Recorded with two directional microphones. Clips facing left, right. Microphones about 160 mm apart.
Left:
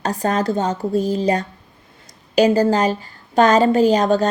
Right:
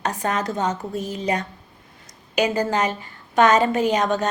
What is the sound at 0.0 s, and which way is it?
A woman's voice, 35° left (ahead or behind).